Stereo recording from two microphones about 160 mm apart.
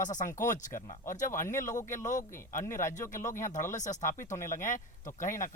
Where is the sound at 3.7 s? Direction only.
50° left (ahead or behind).